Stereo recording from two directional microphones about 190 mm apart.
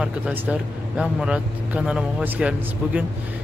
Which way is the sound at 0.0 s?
5° right (ahead or behind).